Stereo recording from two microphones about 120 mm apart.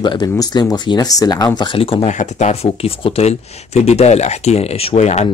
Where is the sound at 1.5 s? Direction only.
45° left (ahead or behind).